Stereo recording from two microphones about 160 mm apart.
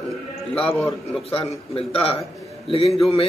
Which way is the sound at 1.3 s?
35° left (ahead or behind).